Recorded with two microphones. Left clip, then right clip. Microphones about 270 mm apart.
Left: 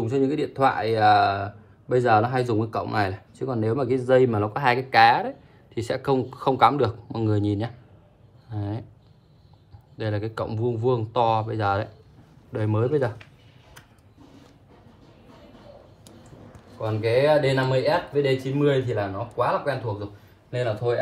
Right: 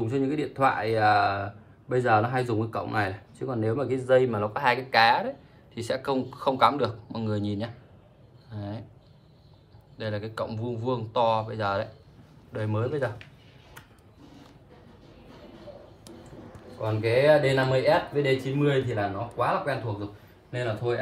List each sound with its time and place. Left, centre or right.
0.0 s speech: centre
9.9 s speech: left
16.8 s speech: centre